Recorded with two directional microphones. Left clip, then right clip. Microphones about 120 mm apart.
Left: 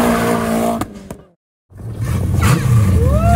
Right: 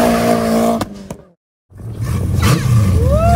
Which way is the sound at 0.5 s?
Centre (ahead or behind).